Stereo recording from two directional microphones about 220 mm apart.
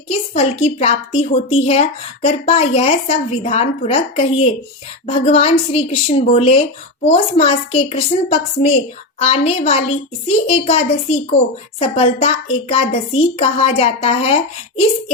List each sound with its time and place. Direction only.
0.1 s a woman's voice: 25° left (ahead or behind)